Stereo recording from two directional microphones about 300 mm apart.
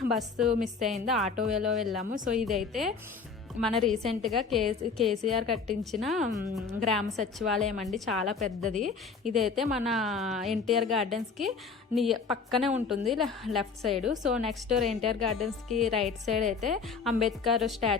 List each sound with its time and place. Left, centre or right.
0.1 s a woman's voice: centre
2.0 s a woman's voice: right
2.3 s a woman's voice: centre
16.4 s a woman's voice: right
16.6 s a woman's voice: centre